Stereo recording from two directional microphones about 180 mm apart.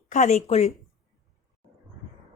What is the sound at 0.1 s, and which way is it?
Speech, 40° left (ahead or behind).